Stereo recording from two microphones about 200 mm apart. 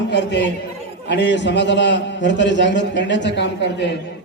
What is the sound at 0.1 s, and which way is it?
A man's voice, 60° left (ahead or behind).